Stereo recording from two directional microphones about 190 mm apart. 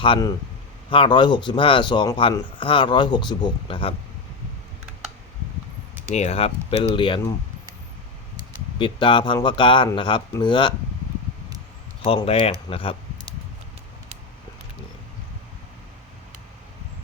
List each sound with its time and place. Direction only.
0.0 s speech: 25° left (ahead or behind)
6.1 s speech: 35° left (ahead or behind)
8.8 s speech: 25° left (ahead or behind)
12.0 s speech: 30° left (ahead or behind)